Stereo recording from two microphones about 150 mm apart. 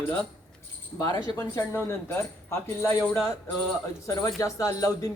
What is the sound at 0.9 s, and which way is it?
Speech, 25° left (ahead or behind).